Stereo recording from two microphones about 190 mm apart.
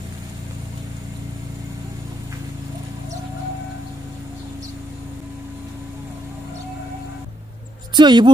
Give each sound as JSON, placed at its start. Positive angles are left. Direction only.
{"t": 7.9, "sound": "speech", "side_deg": -25}